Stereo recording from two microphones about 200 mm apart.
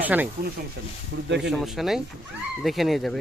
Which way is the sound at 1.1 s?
65° right (ahead or behind).